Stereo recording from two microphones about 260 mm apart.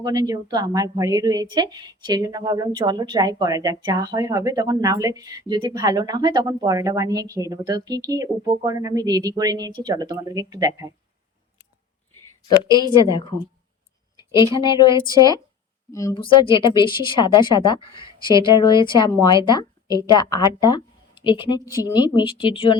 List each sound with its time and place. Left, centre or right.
0.0 s a woman's voice: centre
12.6 s a woman's voice: centre
14.3 s a woman's voice: centre